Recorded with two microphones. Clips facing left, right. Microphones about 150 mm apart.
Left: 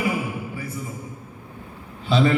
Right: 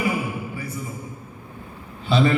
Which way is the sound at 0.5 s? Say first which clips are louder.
Even; 90° left.